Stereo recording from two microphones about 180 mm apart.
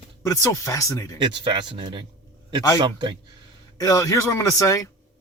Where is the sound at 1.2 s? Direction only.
25° right (ahead or behind).